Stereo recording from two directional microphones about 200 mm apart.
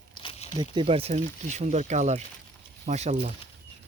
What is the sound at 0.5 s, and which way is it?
Speech, 25° right (ahead or behind).